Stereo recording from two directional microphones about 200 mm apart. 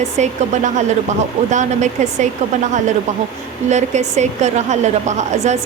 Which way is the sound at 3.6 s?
35° right (ahead or behind).